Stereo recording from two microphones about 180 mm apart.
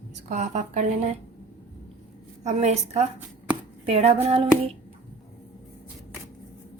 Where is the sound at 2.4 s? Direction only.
40° right (ahead or behind).